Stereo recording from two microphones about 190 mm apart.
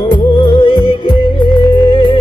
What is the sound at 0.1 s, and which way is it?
Music, 25° left (ahead or behind).